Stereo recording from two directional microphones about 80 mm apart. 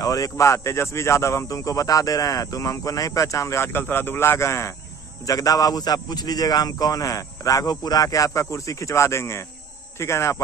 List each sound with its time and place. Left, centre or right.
0.0 s a man's voice: left
5.2 s a man's voice: left